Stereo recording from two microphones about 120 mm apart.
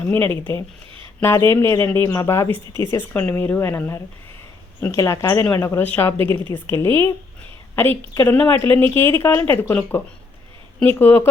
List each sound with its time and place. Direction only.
0.1 s a woman's voice: 15° left (ahead or behind)